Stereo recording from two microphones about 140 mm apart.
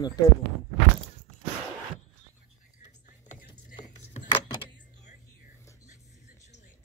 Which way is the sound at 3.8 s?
60° left (ahead or behind).